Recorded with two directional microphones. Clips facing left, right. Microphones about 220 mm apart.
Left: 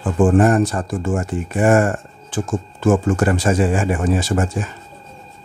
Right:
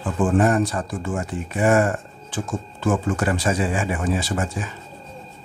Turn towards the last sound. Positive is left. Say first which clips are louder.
# left 5 dB
turn(degrees=45)  # may be behind; listen again after turning